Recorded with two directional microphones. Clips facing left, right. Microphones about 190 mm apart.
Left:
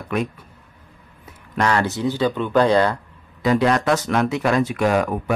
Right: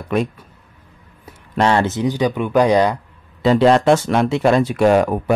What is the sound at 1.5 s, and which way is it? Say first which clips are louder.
Speech: right 4 dB; 25° right (ahead or behind).